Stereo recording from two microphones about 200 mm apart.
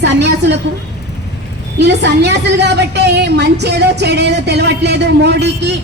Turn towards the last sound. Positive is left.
turn(degrees=-55)  # may be behind; listen again after turning